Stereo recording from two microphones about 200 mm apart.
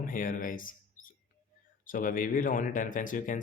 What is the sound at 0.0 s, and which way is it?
Speech, 45° left (ahead or behind).